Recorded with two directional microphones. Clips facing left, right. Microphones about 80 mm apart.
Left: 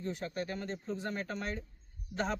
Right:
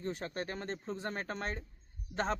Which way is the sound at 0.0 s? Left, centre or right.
Right.